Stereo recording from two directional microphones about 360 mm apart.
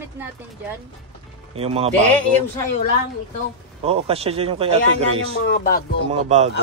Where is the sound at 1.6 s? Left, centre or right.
Centre.